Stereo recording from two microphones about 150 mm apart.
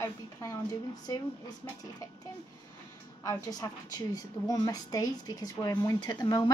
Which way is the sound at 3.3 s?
25° left (ahead or behind).